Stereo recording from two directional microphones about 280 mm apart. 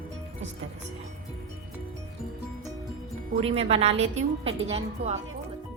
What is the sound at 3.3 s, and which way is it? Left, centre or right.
Speech, right.